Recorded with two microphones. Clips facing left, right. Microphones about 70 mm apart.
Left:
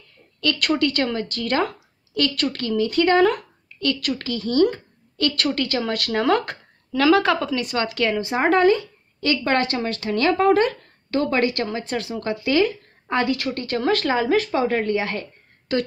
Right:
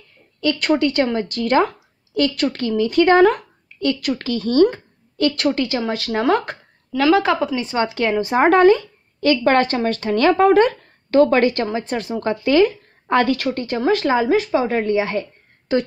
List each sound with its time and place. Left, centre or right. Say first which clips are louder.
0.4 s a woman's voice: right 3 dB; right
7.6 s a woman's voice: right 3 dB; right
8.4 s speech: right 5 dB; right
13.8 s a woman's voice: right 4 dB; centre